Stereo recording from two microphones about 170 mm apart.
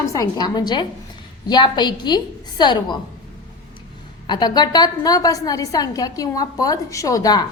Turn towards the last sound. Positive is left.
turn(degrees=20)  # may be behind; listen again after turning